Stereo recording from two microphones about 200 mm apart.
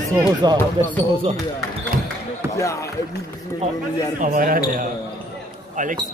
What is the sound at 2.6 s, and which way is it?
Speech, 15° left (ahead or behind).